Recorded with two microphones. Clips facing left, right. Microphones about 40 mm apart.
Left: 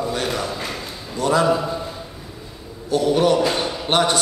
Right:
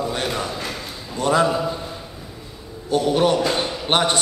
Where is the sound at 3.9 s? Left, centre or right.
Right.